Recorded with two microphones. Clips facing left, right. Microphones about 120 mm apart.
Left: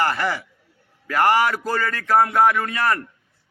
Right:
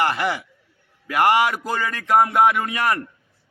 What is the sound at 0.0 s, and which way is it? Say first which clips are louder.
A man's voice: even; 20° right (ahead or behind).